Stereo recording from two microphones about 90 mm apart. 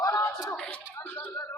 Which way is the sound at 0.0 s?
35° left (ahead or behind).